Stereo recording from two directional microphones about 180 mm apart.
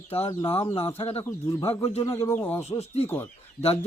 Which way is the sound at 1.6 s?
35° left (ahead or behind).